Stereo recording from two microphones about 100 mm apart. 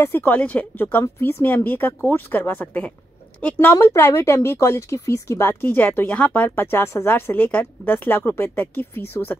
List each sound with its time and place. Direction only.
0.0 s speech: 20° left (ahead or behind)